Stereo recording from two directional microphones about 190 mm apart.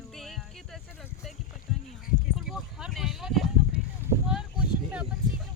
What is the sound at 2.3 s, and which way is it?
Speech, centre (ahead or behind).